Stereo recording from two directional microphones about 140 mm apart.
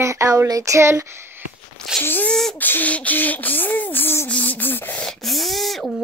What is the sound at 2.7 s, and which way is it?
Beatboxing, 10° left (ahead or behind).